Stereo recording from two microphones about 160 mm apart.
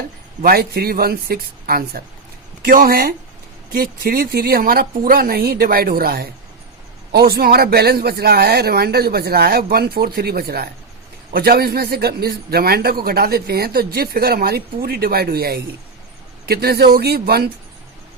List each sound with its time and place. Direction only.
0.4 s a man's voice: 75° right (ahead or behind)